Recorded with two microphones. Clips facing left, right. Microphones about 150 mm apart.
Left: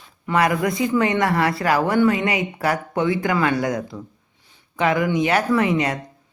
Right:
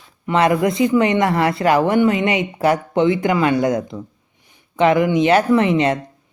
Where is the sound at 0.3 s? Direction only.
25° right (ahead or behind).